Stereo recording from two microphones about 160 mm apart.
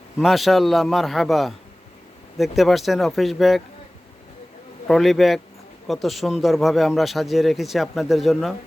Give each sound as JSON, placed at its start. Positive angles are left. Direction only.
{"t": 0.2, "sound": "speech", "side_deg": 0}
{"t": 4.9, "sound": "speech", "side_deg": 0}